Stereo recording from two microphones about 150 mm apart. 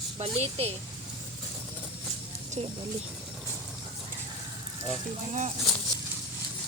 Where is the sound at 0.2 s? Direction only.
45° right (ahead or behind).